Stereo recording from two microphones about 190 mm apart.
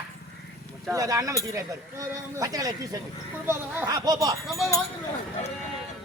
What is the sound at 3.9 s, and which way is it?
Speech, 20° right (ahead or behind).